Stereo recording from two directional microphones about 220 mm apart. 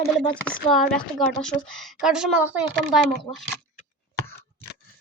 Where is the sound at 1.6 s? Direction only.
Centre (ahead or behind).